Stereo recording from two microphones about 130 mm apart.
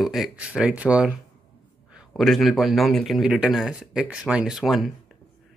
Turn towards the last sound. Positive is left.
turn(degrees=0)  # may be behind; listen again after turning